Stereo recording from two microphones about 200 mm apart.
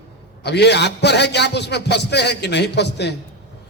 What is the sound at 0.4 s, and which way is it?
A man's voice, 55° left (ahead or behind).